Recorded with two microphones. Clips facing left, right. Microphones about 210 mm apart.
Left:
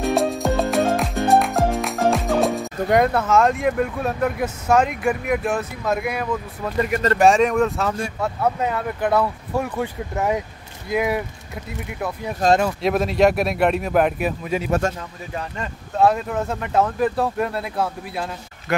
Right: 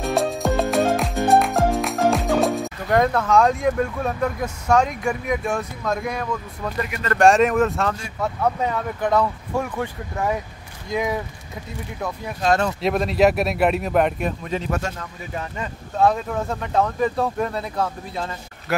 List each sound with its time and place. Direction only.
0.0 s music: centre (ahead or behind)
2.9 s speech: 5° left (ahead or behind)
10.9 s speech: 5° left (ahead or behind)
12.5 s speech: 5° left (ahead or behind)